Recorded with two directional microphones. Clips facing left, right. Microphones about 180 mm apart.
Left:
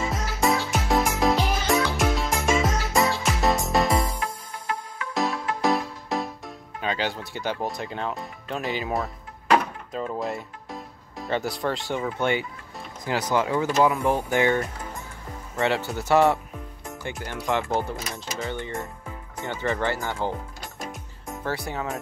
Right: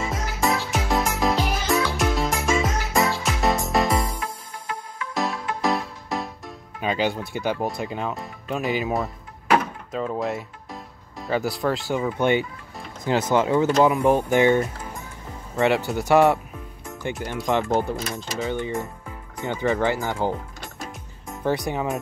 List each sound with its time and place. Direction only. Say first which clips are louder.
0.0 s music: even; centre (ahead or behind)
6.8 s speech: right 4 dB; 15° right (ahead or behind)
9.9 s speech: right 3 dB; centre (ahead or behind)
12.2 s speech: right 4 dB; 20° right (ahead or behind)
21.5 s speech: right 6 dB; 15° right (ahead or behind)